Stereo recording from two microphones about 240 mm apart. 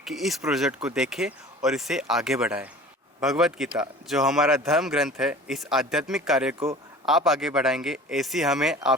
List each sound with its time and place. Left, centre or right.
0.0 s speech: centre